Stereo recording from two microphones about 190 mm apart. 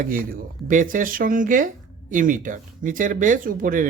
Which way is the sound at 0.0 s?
50° right (ahead or behind).